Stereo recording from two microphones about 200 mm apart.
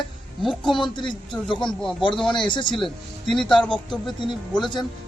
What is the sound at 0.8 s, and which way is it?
Speech, 25° left (ahead or behind).